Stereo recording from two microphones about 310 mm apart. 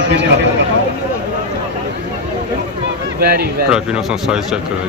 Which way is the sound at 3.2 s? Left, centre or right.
Right.